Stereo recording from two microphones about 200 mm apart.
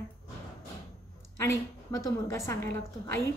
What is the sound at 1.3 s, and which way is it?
A woman's voice, 15° left (ahead or behind).